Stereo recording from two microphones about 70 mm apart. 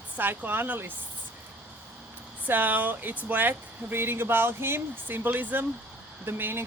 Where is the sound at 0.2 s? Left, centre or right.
Right.